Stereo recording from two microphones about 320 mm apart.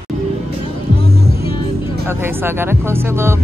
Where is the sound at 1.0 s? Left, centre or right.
Centre.